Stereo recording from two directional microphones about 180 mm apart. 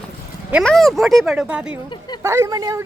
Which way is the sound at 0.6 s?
Centre (ahead or behind).